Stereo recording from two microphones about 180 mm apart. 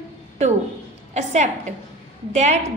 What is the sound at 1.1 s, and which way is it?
A woman's voice, 40° right (ahead or behind).